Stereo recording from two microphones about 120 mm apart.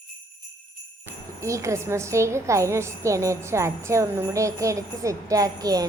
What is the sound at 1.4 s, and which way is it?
Music, 25° right (ahead or behind).